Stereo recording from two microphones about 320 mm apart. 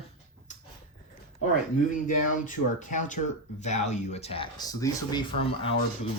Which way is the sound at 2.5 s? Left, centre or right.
Left.